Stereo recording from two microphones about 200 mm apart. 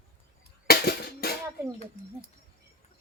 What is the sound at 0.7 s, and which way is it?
Music, 50° left (ahead or behind).